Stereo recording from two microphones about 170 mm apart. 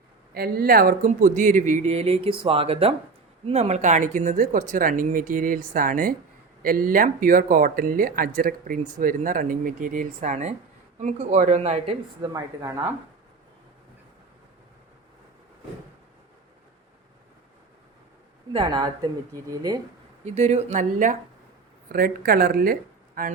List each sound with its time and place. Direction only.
0.3 s speech: 65° right (ahead or behind); by 11.9 s 40° right (ahead or behind)
12.2 s speech: 20° right (ahead or behind)
18.5 s speech: 25° right (ahead or behind)
20.2 s speech: 40° right (ahead or behind)
21.9 s speech: 60° right (ahead or behind)